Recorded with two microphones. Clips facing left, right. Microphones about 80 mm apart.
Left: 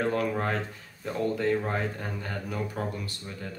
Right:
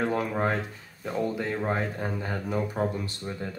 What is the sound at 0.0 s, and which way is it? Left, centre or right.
Speech, centre.